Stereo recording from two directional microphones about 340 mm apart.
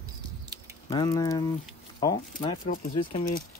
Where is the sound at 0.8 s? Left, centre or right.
Centre.